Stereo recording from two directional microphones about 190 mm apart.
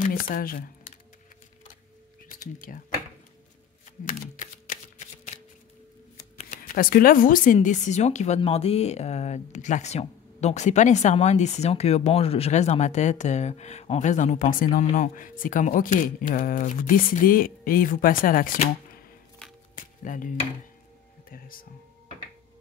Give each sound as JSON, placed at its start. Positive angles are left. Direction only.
{"t": 0.0, "sound": "speech", "side_deg": 45}
{"t": 2.2, "sound": "a sound", "side_deg": 45}
{"t": 4.1, "sound": "typing", "side_deg": 45}
{"t": 6.3, "sound": "speech", "side_deg": 40}
{"t": 20.0, "sound": "speech", "side_deg": 45}